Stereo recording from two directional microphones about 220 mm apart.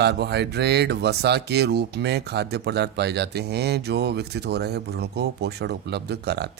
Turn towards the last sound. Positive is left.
turn(degrees=-50)  # may be behind; listen again after turning